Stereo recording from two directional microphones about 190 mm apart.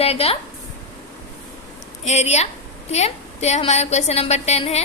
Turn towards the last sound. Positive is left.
turn(degrees=35)  # may be behind; listen again after turning